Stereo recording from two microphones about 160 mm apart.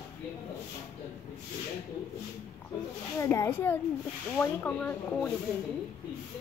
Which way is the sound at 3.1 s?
20° left (ahead or behind).